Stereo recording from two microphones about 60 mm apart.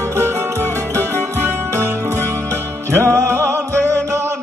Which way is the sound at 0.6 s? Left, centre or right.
Left.